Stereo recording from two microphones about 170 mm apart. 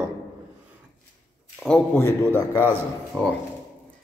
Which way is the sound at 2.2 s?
20° left (ahead or behind).